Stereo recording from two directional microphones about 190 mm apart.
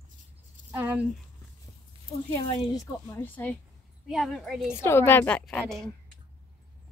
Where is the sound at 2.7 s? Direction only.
15° left (ahead or behind).